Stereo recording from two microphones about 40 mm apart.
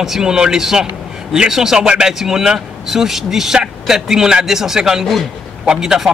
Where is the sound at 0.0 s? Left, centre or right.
Centre.